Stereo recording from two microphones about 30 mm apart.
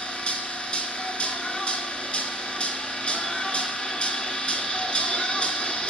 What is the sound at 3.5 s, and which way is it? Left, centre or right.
Music, left.